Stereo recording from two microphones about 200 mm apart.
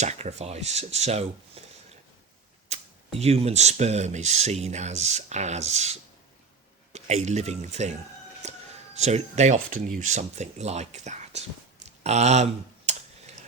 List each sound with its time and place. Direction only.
0.0 s speech: 35° right (ahead or behind)
1.6 s a sound: 30° right (ahead or behind)
2.6 s speech: 30° right (ahead or behind)
8.4 s a sound: 35° right (ahead or behind)
9.0 s speech: 35° right (ahead or behind)
12.0 s typing: 35° right (ahead or behind)